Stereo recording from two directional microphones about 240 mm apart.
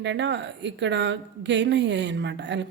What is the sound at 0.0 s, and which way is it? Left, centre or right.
A woman's voice, right.